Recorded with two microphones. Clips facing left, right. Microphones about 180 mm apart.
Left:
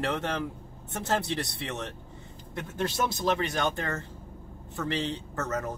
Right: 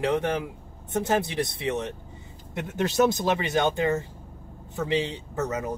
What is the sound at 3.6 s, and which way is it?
Speech, 15° right (ahead or behind).